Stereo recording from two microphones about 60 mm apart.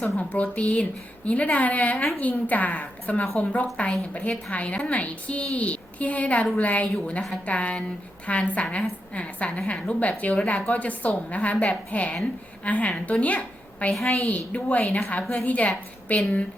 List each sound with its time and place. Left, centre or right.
0.2 s a woman's voice: left